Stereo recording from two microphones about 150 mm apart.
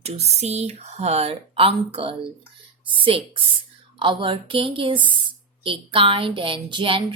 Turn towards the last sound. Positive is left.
turn(degrees=-35)  # may be behind; listen again after turning